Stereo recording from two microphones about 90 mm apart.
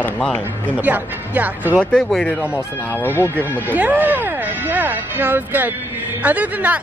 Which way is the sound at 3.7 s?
20° right (ahead or behind).